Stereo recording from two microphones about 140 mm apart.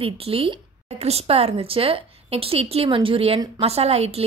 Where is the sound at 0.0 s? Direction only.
40° right (ahead or behind).